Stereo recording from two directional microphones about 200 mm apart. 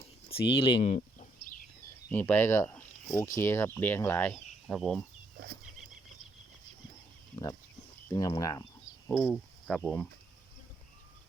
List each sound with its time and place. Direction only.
0.6 s speech: 30° left (ahead or behind)
2.0 s speech: 10° left (ahead or behind)
8.1 s speech: 20° left (ahead or behind)
9.1 s speech: centre (ahead or behind)